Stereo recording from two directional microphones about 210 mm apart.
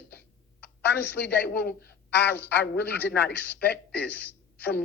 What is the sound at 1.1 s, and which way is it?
A woman's voice, 55° left (ahead or behind).